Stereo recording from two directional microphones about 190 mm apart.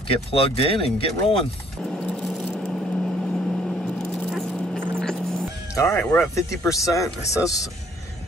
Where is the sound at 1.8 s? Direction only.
5° left (ahead or behind).